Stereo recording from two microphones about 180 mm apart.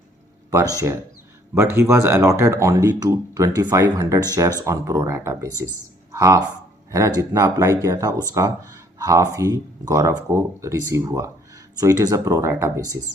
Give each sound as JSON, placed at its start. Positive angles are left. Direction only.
{"t": 0.5, "sound": "speech", "side_deg": -20}